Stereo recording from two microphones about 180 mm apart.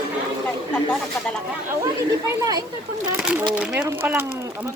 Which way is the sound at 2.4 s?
20° right (ahead or behind).